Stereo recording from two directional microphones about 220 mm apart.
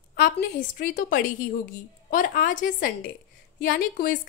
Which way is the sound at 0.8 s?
40° left (ahead or behind).